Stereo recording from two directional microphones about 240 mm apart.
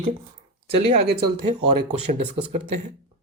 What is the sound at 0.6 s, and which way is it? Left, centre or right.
Speech, right.